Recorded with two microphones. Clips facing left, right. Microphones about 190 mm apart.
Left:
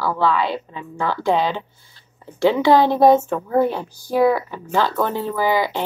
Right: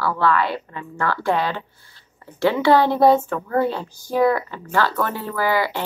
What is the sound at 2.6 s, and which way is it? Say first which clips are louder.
Speech: left 1 dB; 15° left (ahead or behind).